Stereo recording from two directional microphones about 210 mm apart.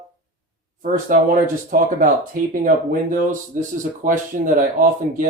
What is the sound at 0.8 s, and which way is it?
Speech, 40° right (ahead or behind).